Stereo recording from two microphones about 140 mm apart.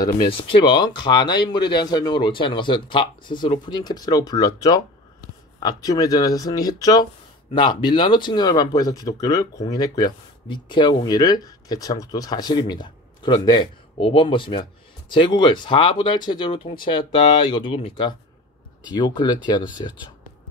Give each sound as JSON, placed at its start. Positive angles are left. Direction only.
{"t": 0.3, "sound": "speech", "side_deg": 35}